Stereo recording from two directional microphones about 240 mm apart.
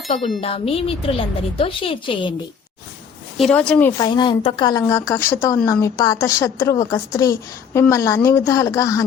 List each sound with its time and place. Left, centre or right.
0.1 s a woman's voice: left
3.3 s a woman's voice: centre
3.9 s speech: centre